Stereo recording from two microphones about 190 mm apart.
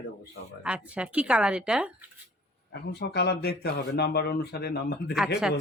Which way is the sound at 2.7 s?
65° left (ahead or behind).